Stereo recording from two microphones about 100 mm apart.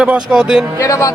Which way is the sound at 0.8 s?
35° left (ahead or behind).